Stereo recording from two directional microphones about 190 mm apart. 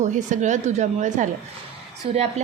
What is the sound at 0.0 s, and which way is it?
A woman's voice, 40° right (ahead or behind).